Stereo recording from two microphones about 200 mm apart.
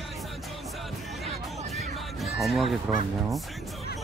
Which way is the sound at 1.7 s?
Centre (ahead or behind).